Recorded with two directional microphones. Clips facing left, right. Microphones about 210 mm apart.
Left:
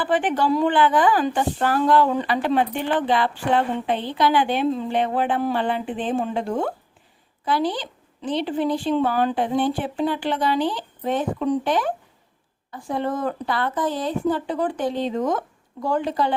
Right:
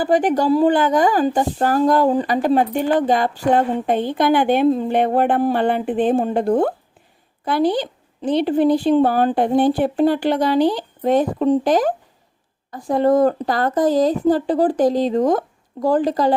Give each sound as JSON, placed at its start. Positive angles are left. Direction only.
{"t": 0.0, "sound": "speech", "side_deg": -40}